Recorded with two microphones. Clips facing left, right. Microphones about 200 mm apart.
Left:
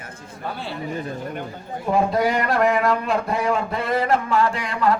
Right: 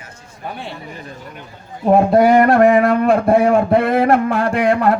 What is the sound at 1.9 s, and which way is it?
Speech, 55° right (ahead or behind).